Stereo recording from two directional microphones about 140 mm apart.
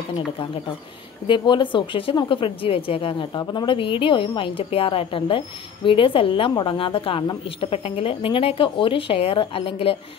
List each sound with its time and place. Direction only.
1.2 s speech: 35° left (ahead or behind)